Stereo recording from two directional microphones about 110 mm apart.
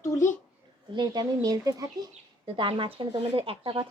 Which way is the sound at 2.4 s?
50° right (ahead or behind).